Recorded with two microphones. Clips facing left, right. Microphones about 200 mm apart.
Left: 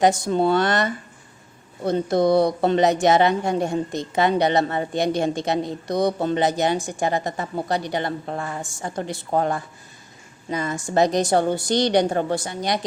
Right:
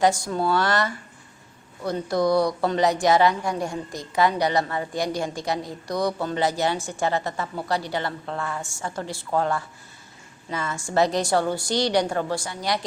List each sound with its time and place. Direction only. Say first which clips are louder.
0.0 s speech: left 3 dB; 20° left (ahead or behind)